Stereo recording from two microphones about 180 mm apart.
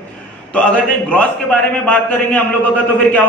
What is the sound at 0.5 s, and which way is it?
A man's voice, 10° left (ahead or behind).